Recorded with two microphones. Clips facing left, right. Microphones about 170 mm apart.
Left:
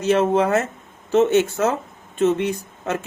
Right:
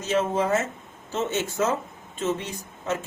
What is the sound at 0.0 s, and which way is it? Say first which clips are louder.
Speech: left 6 dB; 65° left (ahead or behind).